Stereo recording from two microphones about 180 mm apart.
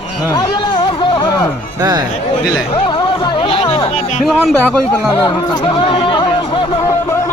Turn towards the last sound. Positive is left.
turn(degrees=20)  # may be behind; listen again after turning